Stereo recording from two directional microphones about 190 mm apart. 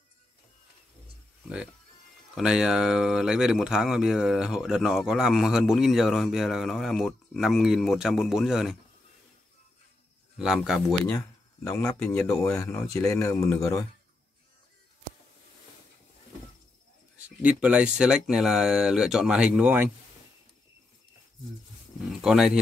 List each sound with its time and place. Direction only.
2.3 s speech: 5° right (ahead or behind)
10.3 s speech: centre (ahead or behind)
11.1 s a sound: 20° left (ahead or behind)
12.1 s speech: 15° left (ahead or behind)
17.4 s speech: 5° right (ahead or behind)
22.2 s speech: 5° right (ahead or behind)